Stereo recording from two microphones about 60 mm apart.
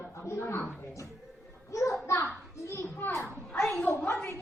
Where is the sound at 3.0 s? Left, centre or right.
Left.